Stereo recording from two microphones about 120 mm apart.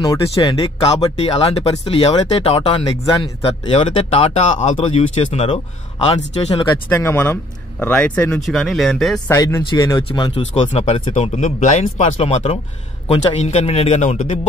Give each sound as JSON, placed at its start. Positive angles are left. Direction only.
{"t": 0.0, "sound": "speech", "side_deg": 35}
{"t": 4.4, "sound": "speech", "side_deg": 70}
{"t": 4.7, "sound": "speech", "side_deg": 55}
{"t": 6.9, "sound": "speech", "side_deg": 20}
{"t": 8.4, "sound": "speech", "side_deg": 0}
{"t": 9.3, "sound": "speech", "side_deg": 25}
{"t": 9.7, "sound": "speech", "side_deg": 35}
{"t": 10.5, "sound": "speech", "side_deg": 55}